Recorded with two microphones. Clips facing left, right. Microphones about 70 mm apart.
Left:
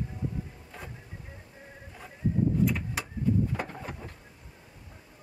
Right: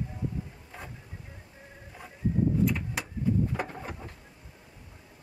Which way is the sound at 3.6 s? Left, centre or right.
Centre.